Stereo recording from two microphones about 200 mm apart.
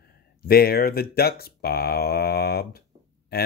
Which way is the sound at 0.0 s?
50° left (ahead or behind).